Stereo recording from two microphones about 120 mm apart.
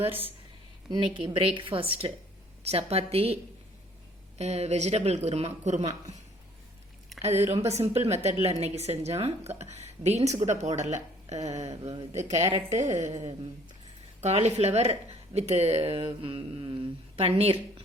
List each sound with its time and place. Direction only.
0.9 s a woman's voice: 45° right (ahead or behind)
4.4 s speech: 65° right (ahead or behind)
7.2 s a woman's voice: 65° right (ahead or behind)